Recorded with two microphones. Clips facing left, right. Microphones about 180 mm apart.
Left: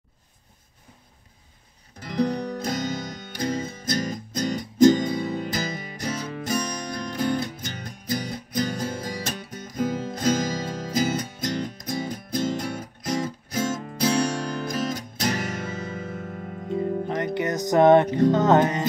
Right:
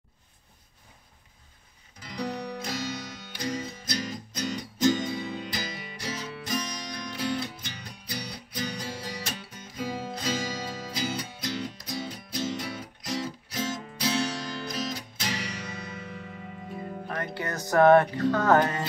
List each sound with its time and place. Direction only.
2.0 s music: 45° left (ahead or behind)
16.7 s music: 20° left (ahead or behind)